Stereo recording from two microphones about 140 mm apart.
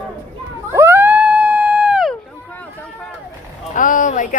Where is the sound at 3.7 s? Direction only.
70° left (ahead or behind).